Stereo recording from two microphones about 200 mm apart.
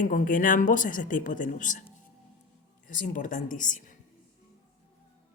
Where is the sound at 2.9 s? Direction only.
40° left (ahead or behind).